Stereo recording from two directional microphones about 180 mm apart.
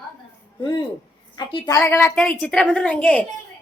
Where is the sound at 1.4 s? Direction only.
25° left (ahead or behind).